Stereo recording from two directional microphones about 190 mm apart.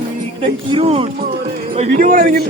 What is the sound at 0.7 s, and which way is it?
Speech, 30° right (ahead or behind).